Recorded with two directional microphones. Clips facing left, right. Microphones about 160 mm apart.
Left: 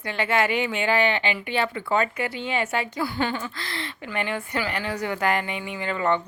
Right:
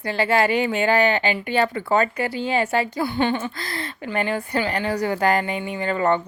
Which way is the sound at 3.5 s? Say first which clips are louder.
Right 3 dB; 40° right (ahead or behind).